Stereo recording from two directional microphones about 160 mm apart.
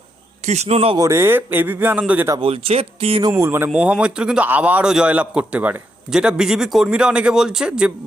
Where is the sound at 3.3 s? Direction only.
15° right (ahead or behind).